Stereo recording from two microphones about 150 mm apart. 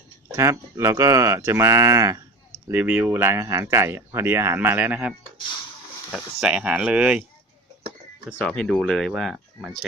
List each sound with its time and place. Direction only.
0.3 s speech: 20° right (ahead or behind)
6.1 s speech: 5° right (ahead or behind)
8.4 s speech: 5° left (ahead or behind)